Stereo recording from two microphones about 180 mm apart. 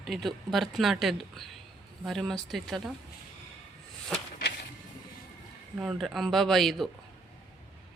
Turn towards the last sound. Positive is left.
turn(degrees=0)  # may be behind; listen again after turning